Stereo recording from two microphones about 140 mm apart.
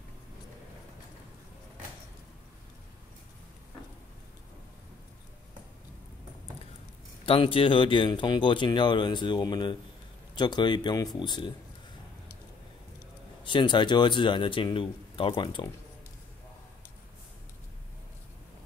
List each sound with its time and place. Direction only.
7.2 s speech: 40° left (ahead or behind)
13.4 s speech: 35° left (ahead or behind)